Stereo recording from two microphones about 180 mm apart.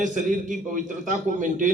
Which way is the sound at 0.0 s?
45° right (ahead or behind).